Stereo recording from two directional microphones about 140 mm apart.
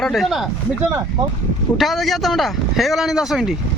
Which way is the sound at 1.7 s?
Centre (ahead or behind).